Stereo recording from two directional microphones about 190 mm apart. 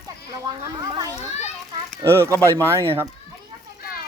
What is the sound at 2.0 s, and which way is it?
Speech, 15° right (ahead or behind).